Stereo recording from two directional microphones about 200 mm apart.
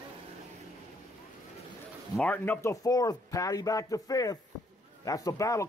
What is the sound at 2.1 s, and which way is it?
A man's voice, 10° left (ahead or behind).